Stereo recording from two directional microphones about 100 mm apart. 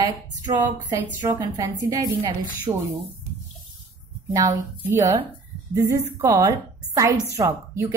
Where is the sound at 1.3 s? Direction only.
35° right (ahead or behind).